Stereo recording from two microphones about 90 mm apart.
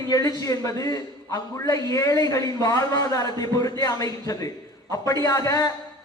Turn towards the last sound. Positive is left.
turn(degrees=40)  # may be behind; listen again after turning